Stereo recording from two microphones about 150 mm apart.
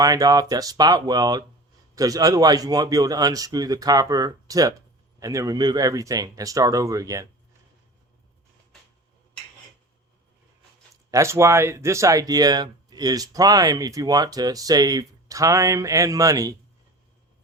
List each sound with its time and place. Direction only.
0.0 s speech: 25° right (ahead or behind)
11.1 s speech: 20° right (ahead or behind)